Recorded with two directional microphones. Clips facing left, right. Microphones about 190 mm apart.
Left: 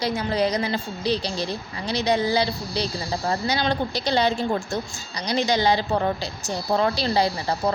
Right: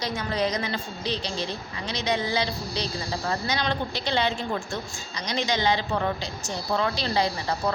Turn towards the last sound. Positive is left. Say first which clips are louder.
# left 4 dB
turn(degrees=35)  # may be behind; listen again after turning